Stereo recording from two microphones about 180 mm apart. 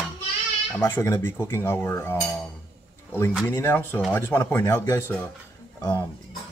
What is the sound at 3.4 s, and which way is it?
Speech, 15° left (ahead or behind).